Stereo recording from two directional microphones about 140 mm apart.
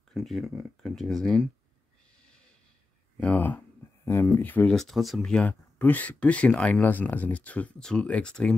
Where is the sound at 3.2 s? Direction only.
10° left (ahead or behind).